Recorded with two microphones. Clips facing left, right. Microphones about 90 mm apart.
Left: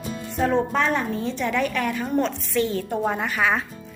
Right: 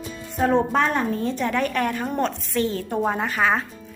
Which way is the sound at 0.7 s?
45° right (ahead or behind).